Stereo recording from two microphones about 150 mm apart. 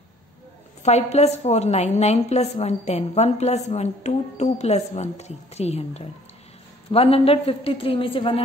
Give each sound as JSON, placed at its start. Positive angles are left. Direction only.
{"t": 0.8, "sound": "a woman's voice", "side_deg": 45}